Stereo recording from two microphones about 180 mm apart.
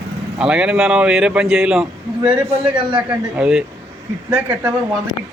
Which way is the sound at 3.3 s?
5° right (ahead or behind).